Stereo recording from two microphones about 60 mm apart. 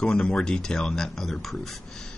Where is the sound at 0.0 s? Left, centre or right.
Centre.